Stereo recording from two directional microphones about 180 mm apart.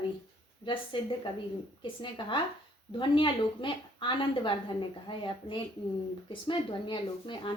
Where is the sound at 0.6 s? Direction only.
25° left (ahead or behind).